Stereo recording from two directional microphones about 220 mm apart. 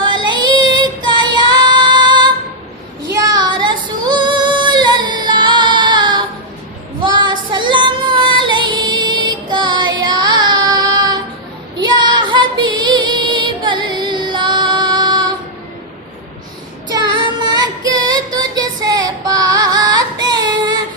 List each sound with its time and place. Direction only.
0.0 s female singing: 20° right (ahead or behind)
11.8 s child singing: 20° right (ahead or behind)
17.4 s female singing: 20° right (ahead or behind)